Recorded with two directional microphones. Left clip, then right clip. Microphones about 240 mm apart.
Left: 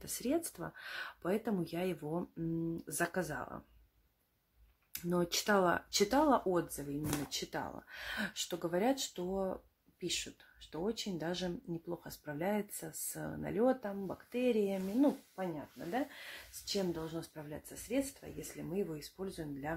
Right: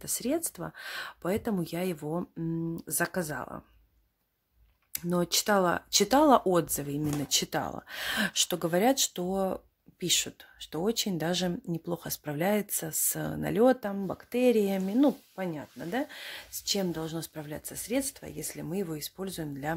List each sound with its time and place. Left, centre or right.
0.0 s speech: right
4.9 s speech: right